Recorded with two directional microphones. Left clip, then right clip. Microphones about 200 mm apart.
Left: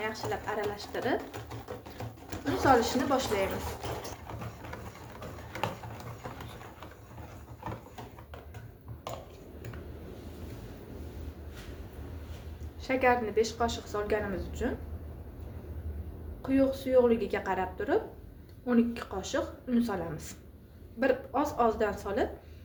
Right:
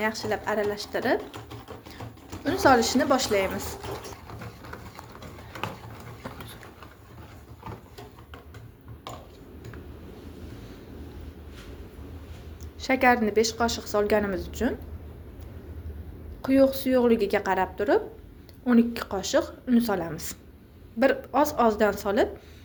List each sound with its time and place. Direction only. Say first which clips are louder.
0.0 s a woman's voice: right 6 dB; 45° right (ahead or behind)
2.6 s a woman's voice: right 5 dB; 40° right (ahead or behind)
12.8 s a woman's voice: right 5 dB; 45° right (ahead or behind)
16.4 s a woman's voice: right 7 dB; 45° right (ahead or behind)